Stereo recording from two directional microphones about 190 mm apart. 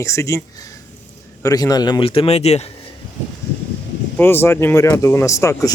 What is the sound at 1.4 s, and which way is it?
A man's voice, 20° left (ahead or behind).